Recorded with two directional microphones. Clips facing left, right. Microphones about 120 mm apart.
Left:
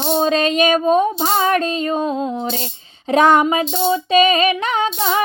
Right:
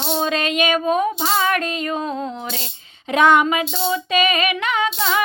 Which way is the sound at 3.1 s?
35° left (ahead or behind).